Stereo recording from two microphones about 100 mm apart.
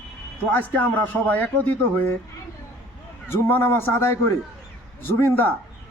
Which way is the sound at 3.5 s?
25° left (ahead or behind).